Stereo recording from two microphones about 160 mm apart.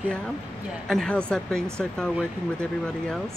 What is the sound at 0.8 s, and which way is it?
Speech, 5° left (ahead or behind).